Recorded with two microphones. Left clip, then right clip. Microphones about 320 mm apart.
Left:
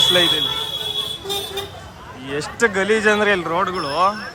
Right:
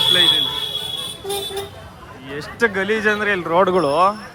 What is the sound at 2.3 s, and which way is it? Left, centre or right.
Speech, centre.